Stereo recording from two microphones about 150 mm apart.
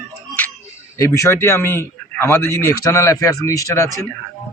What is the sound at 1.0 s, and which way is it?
A man's voice, 20° left (ahead or behind).